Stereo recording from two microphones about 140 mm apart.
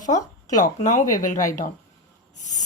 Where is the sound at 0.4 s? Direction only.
60° left (ahead or behind).